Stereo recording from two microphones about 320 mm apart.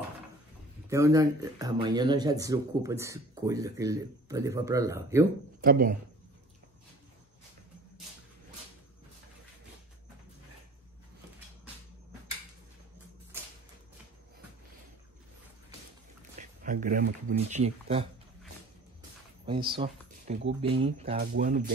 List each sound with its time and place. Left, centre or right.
0.8 s speech: centre
5.6 s speech: right
16.3 s speech: right
19.4 s speech: centre